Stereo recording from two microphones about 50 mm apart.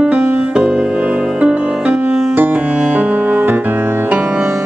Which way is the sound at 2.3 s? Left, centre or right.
Right.